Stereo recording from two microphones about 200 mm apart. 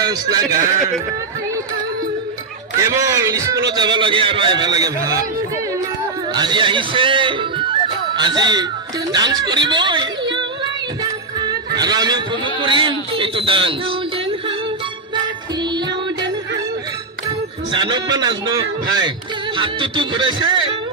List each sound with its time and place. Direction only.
0.0 s a man's voice: 20° right (ahead or behind)
2.9 s a man's voice: 15° right (ahead or behind)
6.3 s speech: 20° right (ahead or behind)
11.7 s a man's voice: 20° right (ahead or behind)
17.7 s speech: 20° right (ahead or behind)